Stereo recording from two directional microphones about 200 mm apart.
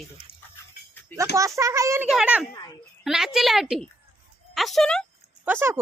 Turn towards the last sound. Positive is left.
turn(degrees=-10)  # may be behind; listen again after turning